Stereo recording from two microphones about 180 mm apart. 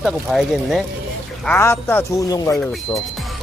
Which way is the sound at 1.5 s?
15° left (ahead or behind).